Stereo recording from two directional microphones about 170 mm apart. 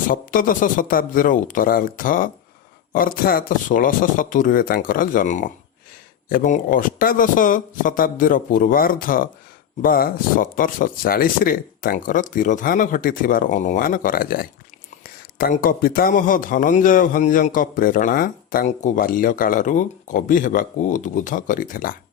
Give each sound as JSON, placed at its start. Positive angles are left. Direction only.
{"t": 0.1, "sound": "speech", "side_deg": 55}